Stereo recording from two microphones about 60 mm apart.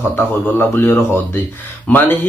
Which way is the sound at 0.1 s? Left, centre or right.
Left.